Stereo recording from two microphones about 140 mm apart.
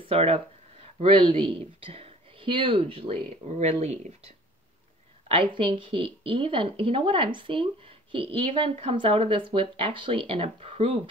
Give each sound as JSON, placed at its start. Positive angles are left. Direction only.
{"t": 0.0, "sound": "a sound", "side_deg": -45}
{"t": 1.3, "sound": "speech", "side_deg": -40}
{"t": 3.4, "sound": "speech", "side_deg": -50}
{"t": 5.3, "sound": "a woman's voice", "side_deg": -40}